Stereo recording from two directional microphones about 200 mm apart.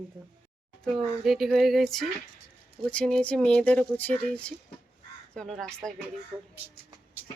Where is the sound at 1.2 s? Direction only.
Centre (ahead or behind).